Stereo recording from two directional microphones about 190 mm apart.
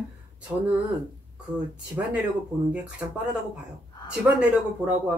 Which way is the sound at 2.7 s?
5° right (ahead or behind).